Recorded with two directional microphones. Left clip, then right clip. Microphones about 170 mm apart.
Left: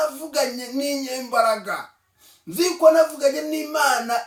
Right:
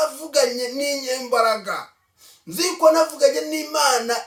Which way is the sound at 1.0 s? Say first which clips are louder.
Right 1 dB; 20° right (ahead or behind).